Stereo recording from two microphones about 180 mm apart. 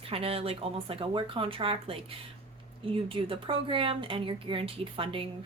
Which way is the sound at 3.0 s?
30° right (ahead or behind).